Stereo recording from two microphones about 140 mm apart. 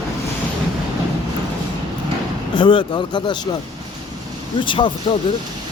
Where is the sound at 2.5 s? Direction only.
35° left (ahead or behind).